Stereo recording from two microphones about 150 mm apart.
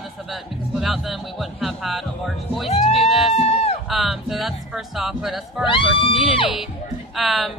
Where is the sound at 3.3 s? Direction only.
45° left (ahead or behind).